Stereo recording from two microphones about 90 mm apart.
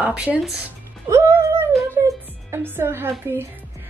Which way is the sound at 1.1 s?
35° right (ahead or behind).